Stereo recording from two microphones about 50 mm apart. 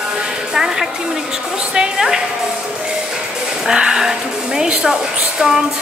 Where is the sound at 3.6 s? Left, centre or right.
Centre.